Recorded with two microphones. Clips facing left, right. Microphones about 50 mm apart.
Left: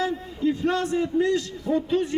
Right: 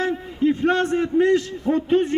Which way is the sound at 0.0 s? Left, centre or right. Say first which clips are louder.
Right 4 dB; right.